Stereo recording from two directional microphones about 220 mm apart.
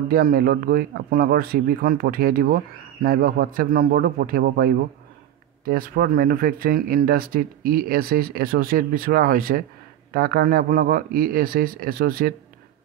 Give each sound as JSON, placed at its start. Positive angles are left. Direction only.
{"t": 0.1, "sound": "speech", "side_deg": -40}